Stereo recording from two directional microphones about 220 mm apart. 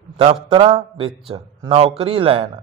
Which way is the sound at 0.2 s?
25° right (ahead or behind).